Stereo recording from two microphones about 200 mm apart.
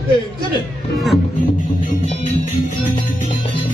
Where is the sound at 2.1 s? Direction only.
35° left (ahead or behind).